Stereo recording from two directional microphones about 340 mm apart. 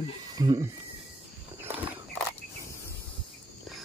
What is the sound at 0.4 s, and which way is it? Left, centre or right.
Speech, centre.